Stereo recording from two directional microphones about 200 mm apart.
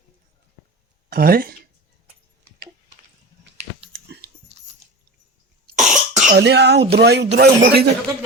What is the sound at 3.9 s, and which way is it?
Dog, 55° right (ahead or behind).